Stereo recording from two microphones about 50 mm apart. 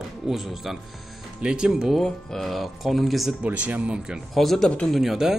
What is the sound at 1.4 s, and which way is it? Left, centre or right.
Speech, centre.